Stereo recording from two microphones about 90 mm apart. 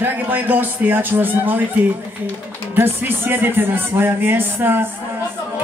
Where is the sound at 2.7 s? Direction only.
25° right (ahead or behind).